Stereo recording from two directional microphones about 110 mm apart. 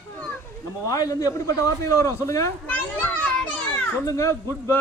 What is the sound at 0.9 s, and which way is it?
A man's voice, 35° left (ahead or behind).